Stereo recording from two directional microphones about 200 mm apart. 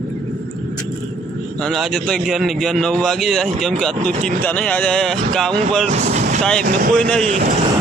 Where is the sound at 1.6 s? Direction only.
Centre (ahead or behind).